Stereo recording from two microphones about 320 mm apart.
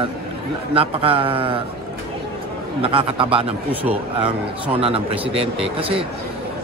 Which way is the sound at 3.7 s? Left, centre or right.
Centre.